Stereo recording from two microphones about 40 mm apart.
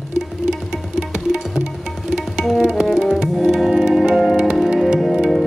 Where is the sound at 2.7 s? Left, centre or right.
Centre.